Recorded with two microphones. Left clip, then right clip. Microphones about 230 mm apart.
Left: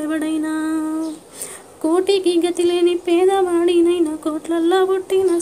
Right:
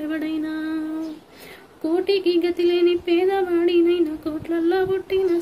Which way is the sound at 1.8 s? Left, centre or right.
Centre.